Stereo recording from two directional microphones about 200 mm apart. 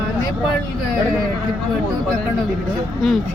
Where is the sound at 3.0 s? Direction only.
Centre (ahead or behind).